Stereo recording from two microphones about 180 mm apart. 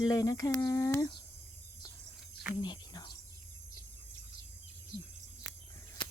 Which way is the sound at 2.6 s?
25° left (ahead or behind).